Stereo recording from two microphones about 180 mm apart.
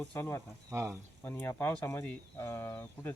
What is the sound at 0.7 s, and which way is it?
Speech, 15° right (ahead or behind).